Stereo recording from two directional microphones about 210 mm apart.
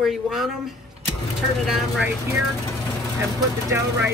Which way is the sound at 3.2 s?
15° right (ahead or behind).